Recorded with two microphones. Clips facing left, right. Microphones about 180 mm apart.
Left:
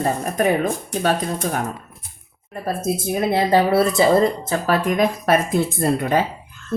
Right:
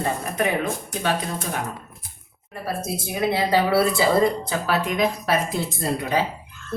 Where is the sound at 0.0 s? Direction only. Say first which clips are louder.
Left 4 dB; 40° left (ahead or behind).